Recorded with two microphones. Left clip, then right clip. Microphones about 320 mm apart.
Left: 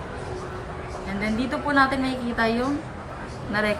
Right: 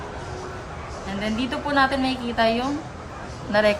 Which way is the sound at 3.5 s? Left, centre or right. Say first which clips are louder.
Right 5 dB; right.